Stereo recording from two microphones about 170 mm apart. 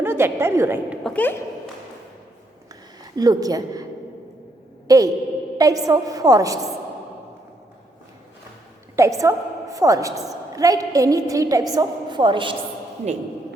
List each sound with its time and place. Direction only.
0.0 s a woman's voice: 15° right (ahead or behind)
1.0 s speech: 10° left (ahead or behind)
3.0 s a woman's voice: 20° right (ahead or behind)
4.9 s a woman's voice: 20° right (ahead or behind)
9.0 s a woman's voice: 20° right (ahead or behind)